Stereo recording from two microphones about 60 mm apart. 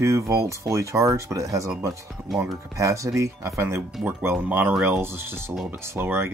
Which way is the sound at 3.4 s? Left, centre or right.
Right.